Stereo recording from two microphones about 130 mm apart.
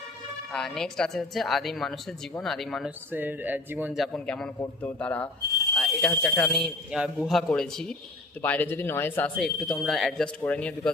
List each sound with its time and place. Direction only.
0.5 s a woman's voice: 5° left (ahead or behind)
3.1 s speech: 15° right (ahead or behind)
3.9 s a woman's voice: 5° left (ahead or behind)
9.4 s a woman's voice: centre (ahead or behind)